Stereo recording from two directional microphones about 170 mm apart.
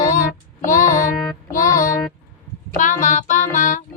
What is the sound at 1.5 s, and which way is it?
Music, 50° left (ahead or behind).